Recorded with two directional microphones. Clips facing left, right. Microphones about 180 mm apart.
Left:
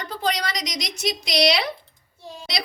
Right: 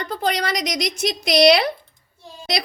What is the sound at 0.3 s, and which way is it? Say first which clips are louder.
A woman's voice: right 3 dB; 55° right (ahead or behind).